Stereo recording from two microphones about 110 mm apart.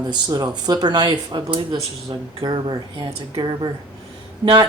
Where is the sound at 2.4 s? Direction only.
40° right (ahead or behind).